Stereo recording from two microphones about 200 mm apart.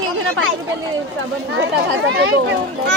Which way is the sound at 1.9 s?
60° right (ahead or behind).